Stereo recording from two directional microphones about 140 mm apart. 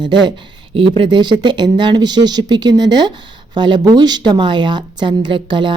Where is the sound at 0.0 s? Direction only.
35° right (ahead or behind).